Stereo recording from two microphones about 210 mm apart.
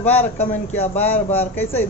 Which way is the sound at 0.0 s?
10° left (ahead or behind).